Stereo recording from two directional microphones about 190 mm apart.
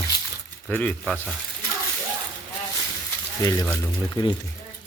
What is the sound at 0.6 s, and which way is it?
Speech, 5° left (ahead or behind).